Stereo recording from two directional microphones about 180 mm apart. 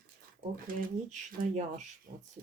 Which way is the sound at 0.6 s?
40° right (ahead or behind).